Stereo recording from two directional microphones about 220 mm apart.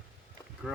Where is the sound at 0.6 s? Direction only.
Centre (ahead or behind).